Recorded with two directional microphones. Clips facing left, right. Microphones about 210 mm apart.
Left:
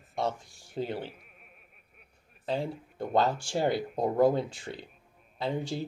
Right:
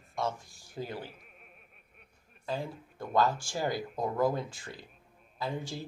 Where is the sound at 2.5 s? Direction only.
30° left (ahead or behind).